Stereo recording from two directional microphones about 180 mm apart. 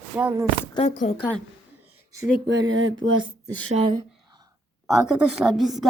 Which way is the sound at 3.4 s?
35° right (ahead or behind).